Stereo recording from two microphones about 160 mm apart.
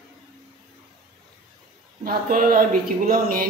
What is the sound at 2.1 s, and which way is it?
Speech, 65° right (ahead or behind).